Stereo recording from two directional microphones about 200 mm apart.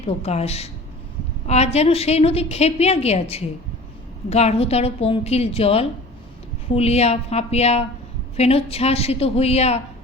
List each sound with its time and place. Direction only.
0.0 s a woman's voice: 30° left (ahead or behind)